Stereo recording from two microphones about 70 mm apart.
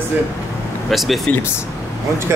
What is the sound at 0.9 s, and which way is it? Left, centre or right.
Speech, centre.